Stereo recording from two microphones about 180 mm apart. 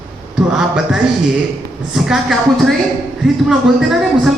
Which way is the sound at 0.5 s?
5° right (ahead or behind).